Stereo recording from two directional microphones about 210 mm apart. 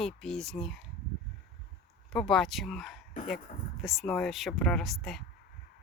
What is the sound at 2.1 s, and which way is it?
A woman's voice, centre (ahead or behind).